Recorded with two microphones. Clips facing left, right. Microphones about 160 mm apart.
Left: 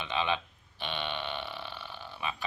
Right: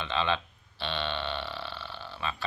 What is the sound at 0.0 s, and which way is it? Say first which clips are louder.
Speech: right 2 dB; 15° left (ahead or behind).